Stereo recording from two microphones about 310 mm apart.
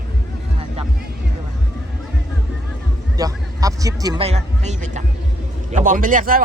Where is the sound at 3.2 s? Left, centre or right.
Centre.